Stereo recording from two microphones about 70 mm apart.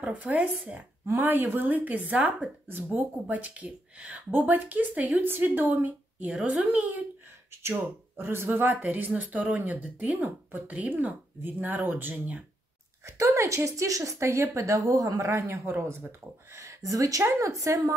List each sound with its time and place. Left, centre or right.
0.0 s speech: centre
8.2 s speech: right
13.0 s a woman's voice: right